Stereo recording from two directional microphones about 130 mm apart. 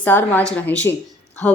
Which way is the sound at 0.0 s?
15° left (ahead or behind).